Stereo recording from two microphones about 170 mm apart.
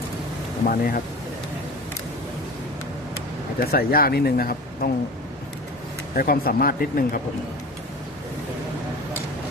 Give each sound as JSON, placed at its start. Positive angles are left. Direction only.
{"t": 0.6, "sound": "speech", "side_deg": 55}
{"t": 3.6, "sound": "speech", "side_deg": 60}
{"t": 6.1, "sound": "speech", "side_deg": 60}